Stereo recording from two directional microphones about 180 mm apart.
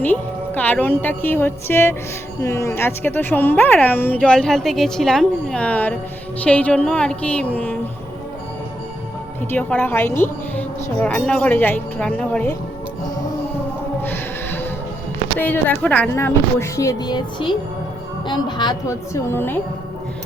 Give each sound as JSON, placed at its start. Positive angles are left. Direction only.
{"t": 0.0, "sound": "a woman's voice", "side_deg": 10}
{"t": 9.5, "sound": "a woman's voice", "side_deg": 10}
{"t": 14.0, "sound": "music", "side_deg": 10}
{"t": 15.4, "sound": "a woman's voice", "side_deg": 10}